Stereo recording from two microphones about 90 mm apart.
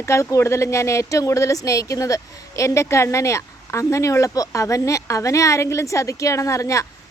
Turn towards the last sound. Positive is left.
turn(degrees=35)  # may be behind; listen again after turning